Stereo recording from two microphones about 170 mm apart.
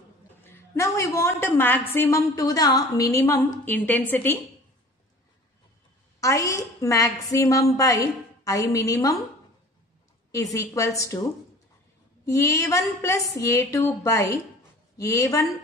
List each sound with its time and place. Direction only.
0.4 s a woman's voice: 15° left (ahead or behind)
6.2 s a woman's voice: 20° left (ahead or behind)
10.3 s a woman's voice: 20° left (ahead or behind)
12.3 s a woman's voice: 20° left (ahead or behind)